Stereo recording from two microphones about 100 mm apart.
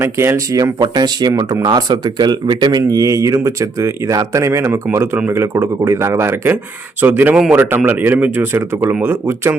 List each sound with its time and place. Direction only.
0.0 s speech: 25° right (ahead or behind)